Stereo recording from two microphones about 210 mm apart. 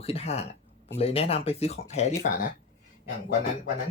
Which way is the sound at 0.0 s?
30° left (ahead or behind).